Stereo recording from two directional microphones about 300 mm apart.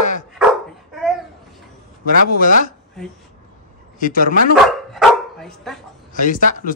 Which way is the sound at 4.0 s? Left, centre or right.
Left.